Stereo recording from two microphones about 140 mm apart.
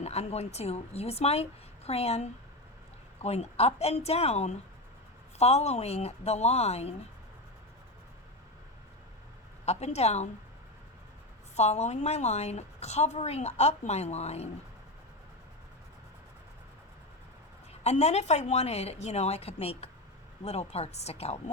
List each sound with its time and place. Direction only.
0.0 s a woman's voice: 50° left (ahead or behind)
9.6 s a woman's voice: 50° left (ahead or behind)
11.5 s a woman's voice: 50° left (ahead or behind)
17.8 s a woman's voice: 50° left (ahead or behind)